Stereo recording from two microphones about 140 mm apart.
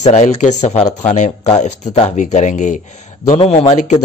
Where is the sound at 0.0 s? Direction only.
60° left (ahead or behind).